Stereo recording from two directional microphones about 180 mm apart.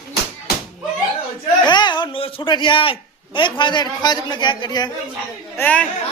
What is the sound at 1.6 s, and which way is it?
A man's voice, 25° left (ahead or behind).